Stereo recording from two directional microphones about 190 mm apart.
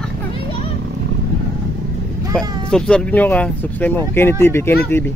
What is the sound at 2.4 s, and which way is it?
Speech, 20° right (ahead or behind).